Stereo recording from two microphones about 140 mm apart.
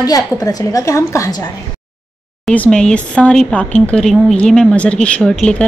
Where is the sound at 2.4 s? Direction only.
10° left (ahead or behind).